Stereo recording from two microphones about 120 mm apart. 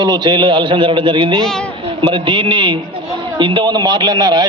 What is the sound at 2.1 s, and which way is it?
A man's voice, 45° right (ahead or behind).